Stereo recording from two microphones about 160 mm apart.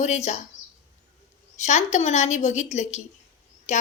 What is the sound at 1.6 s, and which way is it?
A woman's voice, 45° left (ahead or behind).